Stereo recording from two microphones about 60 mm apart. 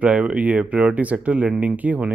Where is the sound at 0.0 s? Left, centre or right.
Right.